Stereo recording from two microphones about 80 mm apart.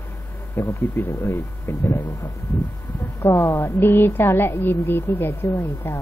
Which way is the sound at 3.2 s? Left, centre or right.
Left.